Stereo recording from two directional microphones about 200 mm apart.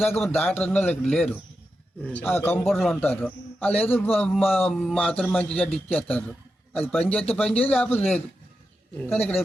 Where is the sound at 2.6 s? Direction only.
Centre (ahead or behind).